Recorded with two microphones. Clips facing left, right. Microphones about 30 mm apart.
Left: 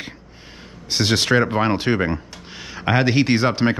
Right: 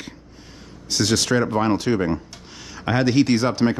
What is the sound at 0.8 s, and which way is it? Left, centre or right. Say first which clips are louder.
Speech: left 1 dB; left.